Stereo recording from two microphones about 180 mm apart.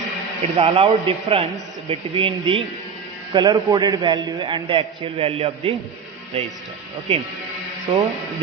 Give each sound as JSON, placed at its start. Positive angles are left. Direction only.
{"t": 0.5, "sound": "a man's voice", "side_deg": -35}
{"t": 7.1, "sound": "a man's voice", "side_deg": -35}